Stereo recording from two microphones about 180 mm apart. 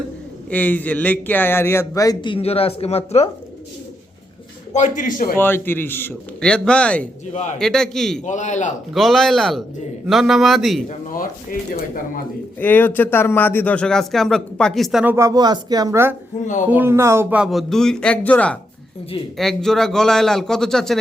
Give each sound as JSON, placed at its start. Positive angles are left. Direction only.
{"t": 0.5, "sound": "a man's voice", "side_deg": 10}
{"t": 4.7, "sound": "a man's voice", "side_deg": 45}
{"t": 5.4, "sound": "a man's voice", "side_deg": 10}
{"t": 8.2, "sound": "a man's voice", "side_deg": 40}
{"t": 8.9, "sound": "speech", "side_deg": 0}
{"t": 10.8, "sound": "a man's voice", "side_deg": 50}
{"t": 12.5, "sound": "a man's voice", "side_deg": 10}
{"t": 15.1, "sound": "speech", "side_deg": -20}